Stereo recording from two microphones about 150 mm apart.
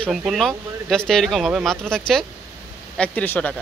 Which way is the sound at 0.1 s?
5° right (ahead or behind).